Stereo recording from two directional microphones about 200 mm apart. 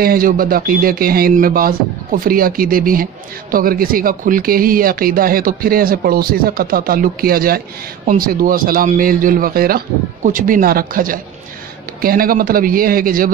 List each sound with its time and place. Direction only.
0.0 s speech: 45° right (ahead or behind)